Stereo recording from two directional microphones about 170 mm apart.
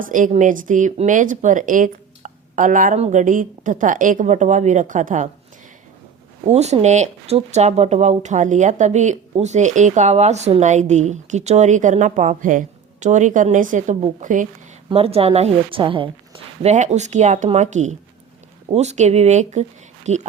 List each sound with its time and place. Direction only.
0.0 s speech: 50° right (ahead or behind)
6.5 s speech: 40° right (ahead or behind)
14.8 s a woman's voice: 35° right (ahead or behind)
16.7 s a woman's voice: 45° right (ahead or behind)